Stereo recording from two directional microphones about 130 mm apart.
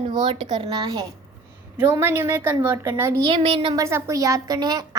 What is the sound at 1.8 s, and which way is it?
A woman's voice, 20° right (ahead or behind).